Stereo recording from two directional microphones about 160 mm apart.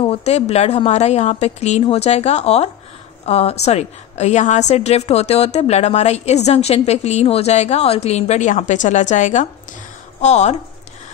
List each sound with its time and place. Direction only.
0.0 s a woman's voice: 40° left (ahead or behind)